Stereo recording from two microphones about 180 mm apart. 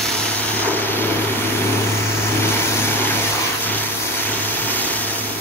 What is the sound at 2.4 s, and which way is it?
Vehicle, 10° left (ahead or behind).